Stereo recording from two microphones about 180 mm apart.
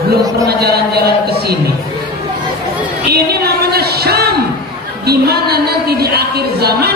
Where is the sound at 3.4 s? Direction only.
60° right (ahead or behind).